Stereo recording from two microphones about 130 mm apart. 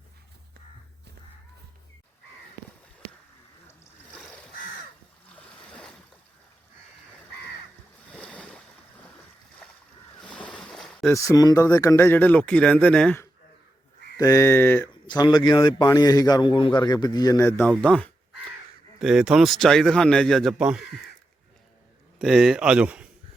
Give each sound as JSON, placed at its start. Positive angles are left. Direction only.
{"t": 4.1, "sound": "crow", "side_deg": 10}
{"t": 5.3, "sound": "a sound", "side_deg": 10}
{"t": 8.1, "sound": "boat", "side_deg": 10}
{"t": 10.2, "sound": "boat", "side_deg": 10}
{"t": 11.1, "sound": "speech", "side_deg": 25}
{"t": 14.2, "sound": "speech", "side_deg": 25}
{"t": 15.0, "sound": "a man's voice", "side_deg": 35}
{"t": 17.6, "sound": "speech", "side_deg": 5}
{"t": 18.9, "sound": "a man's voice", "side_deg": -5}
{"t": 22.2, "sound": "speech", "side_deg": -5}